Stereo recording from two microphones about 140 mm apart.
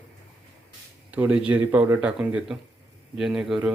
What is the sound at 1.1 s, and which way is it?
Speech, 10° right (ahead or behind).